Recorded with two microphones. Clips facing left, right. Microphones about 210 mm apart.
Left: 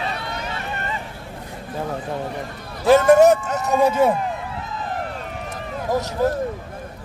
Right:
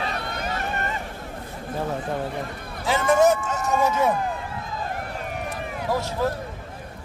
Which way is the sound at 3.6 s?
35° left (ahead or behind).